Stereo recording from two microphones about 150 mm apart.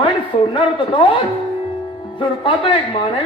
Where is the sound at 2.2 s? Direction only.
35° left (ahead or behind).